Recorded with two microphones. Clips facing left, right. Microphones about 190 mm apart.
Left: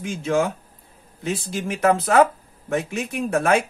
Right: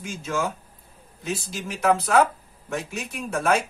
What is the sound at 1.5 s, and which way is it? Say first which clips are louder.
Speech: left 3 dB; 55° left (ahead or behind).